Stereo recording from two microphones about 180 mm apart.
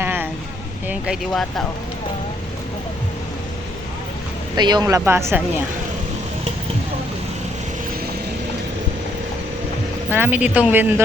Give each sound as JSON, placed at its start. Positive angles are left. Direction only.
{"t": 0.0, "sound": "a sound", "side_deg": -10}
{"t": 0.9, "sound": "speech", "side_deg": -5}
{"t": 4.5, "sound": "speech", "side_deg": -25}
{"t": 10.1, "sound": "speech", "side_deg": -10}